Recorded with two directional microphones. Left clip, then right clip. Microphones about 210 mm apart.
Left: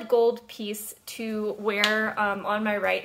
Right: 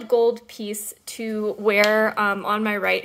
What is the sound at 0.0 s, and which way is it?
Speech, 20° right (ahead or behind).